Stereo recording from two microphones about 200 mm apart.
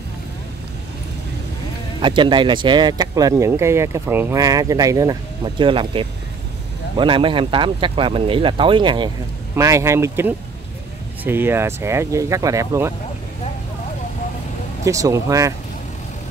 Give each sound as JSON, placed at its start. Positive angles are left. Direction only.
{"t": 2.0, "sound": "speech", "side_deg": -25}
{"t": 14.9, "sound": "speech", "side_deg": -15}